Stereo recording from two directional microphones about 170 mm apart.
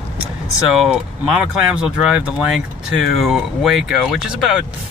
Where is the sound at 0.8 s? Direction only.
5° right (ahead or behind).